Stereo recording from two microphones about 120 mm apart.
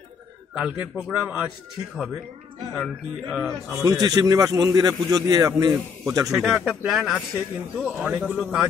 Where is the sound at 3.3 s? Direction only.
Centre (ahead or behind).